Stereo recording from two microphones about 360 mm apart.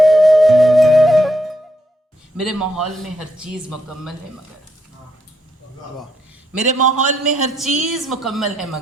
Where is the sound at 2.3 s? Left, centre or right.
Centre.